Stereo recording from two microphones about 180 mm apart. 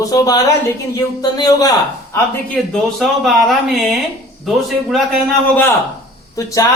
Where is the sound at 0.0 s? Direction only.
20° left (ahead or behind).